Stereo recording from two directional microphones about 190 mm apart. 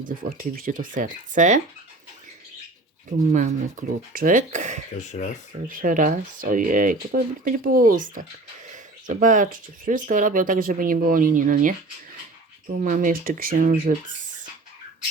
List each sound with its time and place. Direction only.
0.0 s speech: 45° right (ahead or behind)
3.1 s speech: 40° right (ahead or behind)
5.0 s speech: 40° left (ahead or behind)
5.6 s speech: 45° right (ahead or behind)
12.8 s speech: 45° right (ahead or behind)